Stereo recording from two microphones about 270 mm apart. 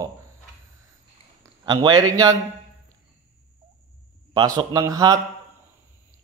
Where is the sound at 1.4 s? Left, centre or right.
Centre.